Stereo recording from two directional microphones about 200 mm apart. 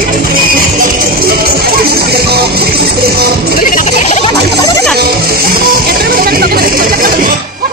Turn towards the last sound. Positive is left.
turn(degrees=-45)  # may be behind; listen again after turning